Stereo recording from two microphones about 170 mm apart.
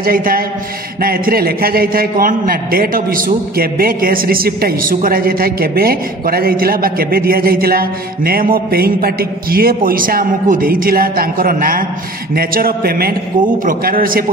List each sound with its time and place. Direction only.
0.0 s a man's voice: 60° right (ahead or behind)